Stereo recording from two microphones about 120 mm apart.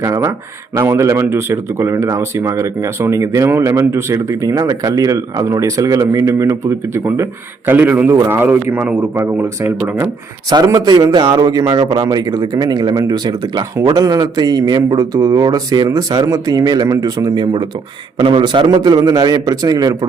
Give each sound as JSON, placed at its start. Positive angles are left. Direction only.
{"t": 0.0, "sound": "a man's voice", "side_deg": -25}
{"t": 10.7, "sound": "a man's voice", "side_deg": -35}